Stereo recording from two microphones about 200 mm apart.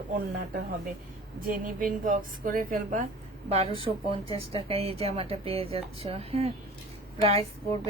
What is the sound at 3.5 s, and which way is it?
Speech, 30° right (ahead or behind).